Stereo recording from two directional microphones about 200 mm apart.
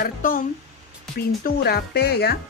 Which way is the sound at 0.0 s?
45° left (ahead or behind).